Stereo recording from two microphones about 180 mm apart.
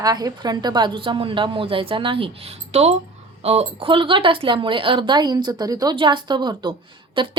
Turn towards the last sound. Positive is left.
turn(degrees=-25)  # may be behind; listen again after turning